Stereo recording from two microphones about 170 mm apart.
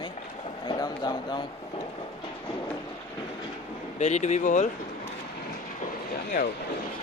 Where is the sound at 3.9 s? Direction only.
40° left (ahead or behind).